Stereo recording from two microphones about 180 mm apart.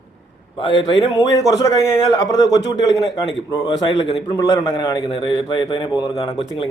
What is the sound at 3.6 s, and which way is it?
A man's voice, 30° left (ahead or behind).